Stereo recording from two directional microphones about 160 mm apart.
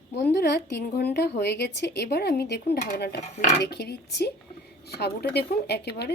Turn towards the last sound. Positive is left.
turn(degrees=90)